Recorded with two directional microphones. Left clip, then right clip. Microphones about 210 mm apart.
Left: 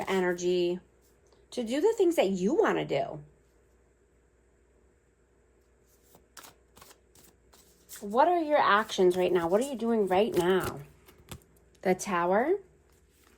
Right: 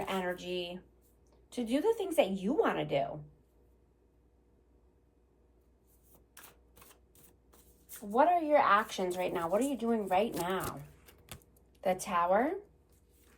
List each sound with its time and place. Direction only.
0.0 s speech: 45° left (ahead or behind)
8.1 s speech: 45° left (ahead or behind)
10.7 s a sound: centre (ahead or behind)
11.8 s speech: 45° left (ahead or behind)